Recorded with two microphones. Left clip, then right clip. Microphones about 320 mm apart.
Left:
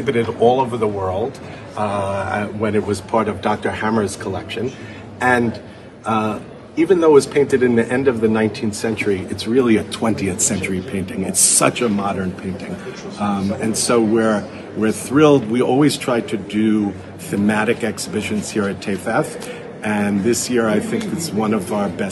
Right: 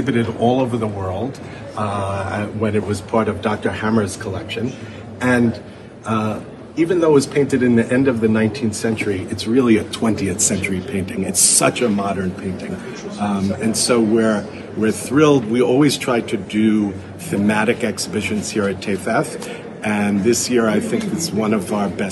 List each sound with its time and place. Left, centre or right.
0.0 s a man's voice: left
6.8 s a man's voice: left; by 12.2 s centre
13.2 s a man's voice: centre